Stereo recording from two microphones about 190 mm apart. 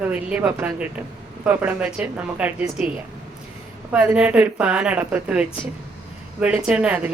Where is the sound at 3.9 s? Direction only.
5° right (ahead or behind).